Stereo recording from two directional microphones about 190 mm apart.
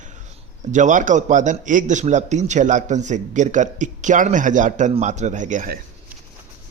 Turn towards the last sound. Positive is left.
turn(degrees=-40)  # may be behind; listen again after turning